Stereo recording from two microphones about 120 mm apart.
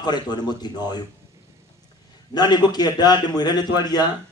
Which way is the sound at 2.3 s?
35° left (ahead or behind).